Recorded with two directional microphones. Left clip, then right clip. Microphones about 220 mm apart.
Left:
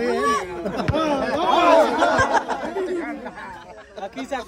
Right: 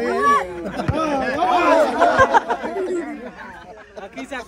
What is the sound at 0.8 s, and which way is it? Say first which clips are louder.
Speech: right 2 dB; 10° left (ahead or behind).